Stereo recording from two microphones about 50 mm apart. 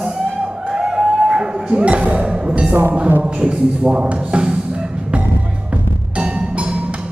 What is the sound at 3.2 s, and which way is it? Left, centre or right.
Speech, centre.